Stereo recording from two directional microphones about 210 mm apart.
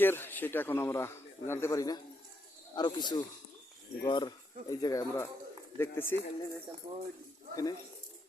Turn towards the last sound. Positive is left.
turn(degrees=15)  # may be behind; listen again after turning